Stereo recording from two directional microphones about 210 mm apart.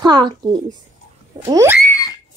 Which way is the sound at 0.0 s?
20° right (ahead or behind).